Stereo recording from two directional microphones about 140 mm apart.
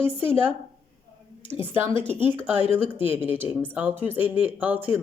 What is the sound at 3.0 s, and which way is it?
Speech, 15° right (ahead or behind).